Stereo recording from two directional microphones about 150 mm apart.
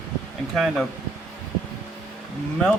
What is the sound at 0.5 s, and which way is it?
Speech, centre (ahead or behind).